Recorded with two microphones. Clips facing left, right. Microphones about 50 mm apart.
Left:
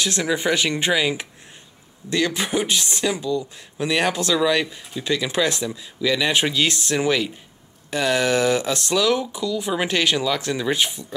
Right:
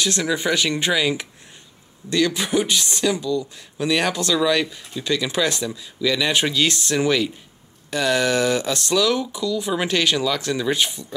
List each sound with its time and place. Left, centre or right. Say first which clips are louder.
0.0 s speech: even; centre